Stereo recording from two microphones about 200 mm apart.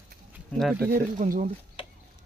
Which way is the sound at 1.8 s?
25° left (ahead or behind).